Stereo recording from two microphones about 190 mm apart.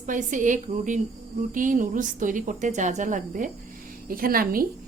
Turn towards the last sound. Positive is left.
turn(degrees=-50)  # may be behind; listen again after turning